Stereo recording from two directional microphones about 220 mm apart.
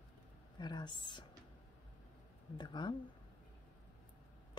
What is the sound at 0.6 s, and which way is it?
Speech, 20° left (ahead or behind).